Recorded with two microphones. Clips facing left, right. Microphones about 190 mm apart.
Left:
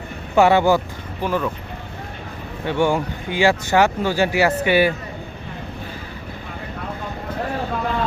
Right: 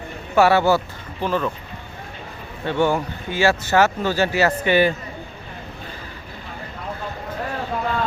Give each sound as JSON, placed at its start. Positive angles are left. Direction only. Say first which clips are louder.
{"t": 0.3, "sound": "speech", "louder": "left 1 dB", "side_deg": 15}
{"t": 2.6, "sound": "speech", "louder": "left 1 dB", "side_deg": 15}